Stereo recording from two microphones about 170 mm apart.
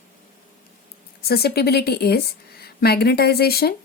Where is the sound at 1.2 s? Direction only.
65° left (ahead or behind).